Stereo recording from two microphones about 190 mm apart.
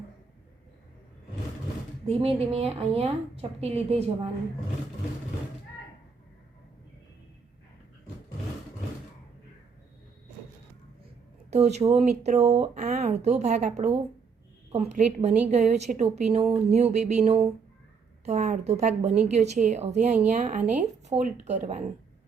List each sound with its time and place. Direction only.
2.0 s speech: 30° right (ahead or behind)
11.5 s speech: 35° right (ahead or behind)